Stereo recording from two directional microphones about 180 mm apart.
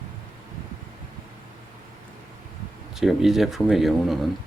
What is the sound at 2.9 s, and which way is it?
Speech, centre (ahead or behind).